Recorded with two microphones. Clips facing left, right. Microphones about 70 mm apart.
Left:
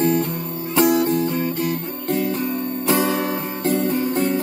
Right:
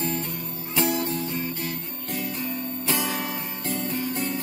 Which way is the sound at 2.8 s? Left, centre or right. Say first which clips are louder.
Left 9 dB; left.